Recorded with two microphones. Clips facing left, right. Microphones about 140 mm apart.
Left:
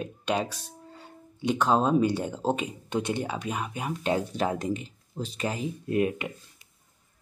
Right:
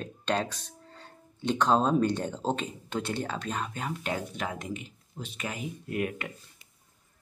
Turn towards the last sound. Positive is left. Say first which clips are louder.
# left 6 dB
turn(degrees=25)  # may be behind; listen again after turning